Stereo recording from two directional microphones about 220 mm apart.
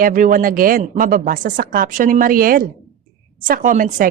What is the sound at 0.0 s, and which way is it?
A woman's voice, 35° right (ahead or behind).